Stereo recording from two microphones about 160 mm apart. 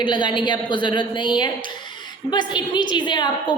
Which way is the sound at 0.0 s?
30° left (ahead or behind).